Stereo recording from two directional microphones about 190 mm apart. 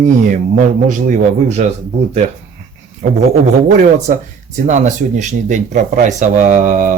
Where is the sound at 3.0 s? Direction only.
45° right (ahead or behind).